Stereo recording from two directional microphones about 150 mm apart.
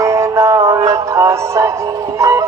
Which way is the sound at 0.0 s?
20° right (ahead or behind).